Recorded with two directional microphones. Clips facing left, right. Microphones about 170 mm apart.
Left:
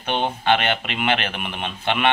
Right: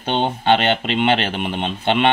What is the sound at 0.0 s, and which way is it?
Speech, 30° right (ahead or behind).